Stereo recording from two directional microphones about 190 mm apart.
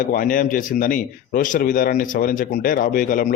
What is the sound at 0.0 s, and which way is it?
A man's voice, 45° left (ahead or behind).